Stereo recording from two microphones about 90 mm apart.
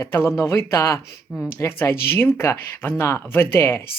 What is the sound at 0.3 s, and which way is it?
Speech, 30° left (ahead or behind).